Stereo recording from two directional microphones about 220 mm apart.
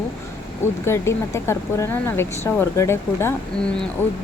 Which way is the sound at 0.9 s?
10° left (ahead or behind).